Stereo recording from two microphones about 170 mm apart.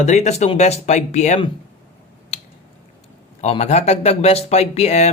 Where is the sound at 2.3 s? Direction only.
35° left (ahead or behind).